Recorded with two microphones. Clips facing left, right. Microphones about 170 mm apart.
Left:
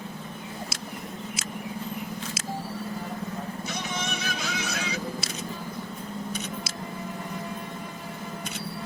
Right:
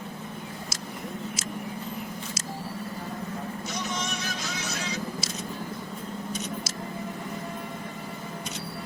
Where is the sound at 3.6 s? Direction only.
55° left (ahead or behind).